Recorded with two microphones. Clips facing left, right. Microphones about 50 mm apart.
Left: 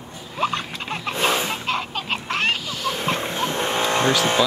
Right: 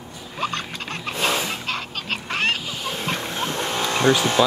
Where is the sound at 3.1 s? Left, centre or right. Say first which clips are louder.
Left 2 dB; left.